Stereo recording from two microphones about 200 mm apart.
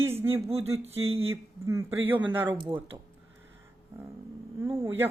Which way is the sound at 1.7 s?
10° right (ahead or behind).